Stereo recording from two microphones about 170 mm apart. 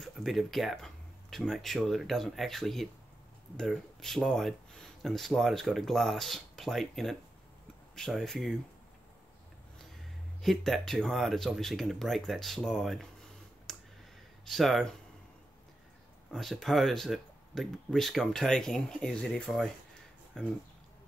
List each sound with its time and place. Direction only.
0.0 s speech: centre (ahead or behind)
10.4 s speech: centre (ahead or behind)
13.7 s clicking: centre (ahead or behind)
14.4 s speech: centre (ahead or behind)
16.3 s speech: centre (ahead or behind)